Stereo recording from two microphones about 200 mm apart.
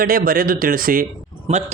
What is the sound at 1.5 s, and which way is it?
Speech, 30° right (ahead or behind).